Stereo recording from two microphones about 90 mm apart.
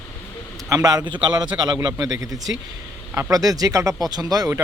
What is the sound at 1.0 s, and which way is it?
Speech, 60° right (ahead or behind).